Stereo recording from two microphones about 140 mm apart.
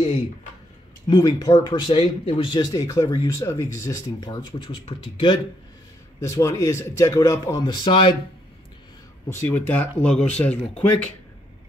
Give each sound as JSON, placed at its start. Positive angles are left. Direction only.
{"t": 1.0, "sound": "speech", "side_deg": 30}
{"t": 4.6, "sound": "speech", "side_deg": 40}
{"t": 6.2, "sound": "speech", "side_deg": 20}
{"t": 9.3, "sound": "speech", "side_deg": 15}